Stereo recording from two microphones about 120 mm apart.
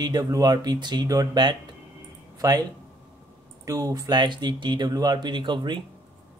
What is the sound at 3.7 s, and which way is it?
Speech, 30° right (ahead or behind).